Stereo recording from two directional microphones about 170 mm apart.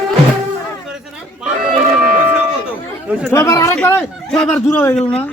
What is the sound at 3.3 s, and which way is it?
Speech, 20° left (ahead or behind).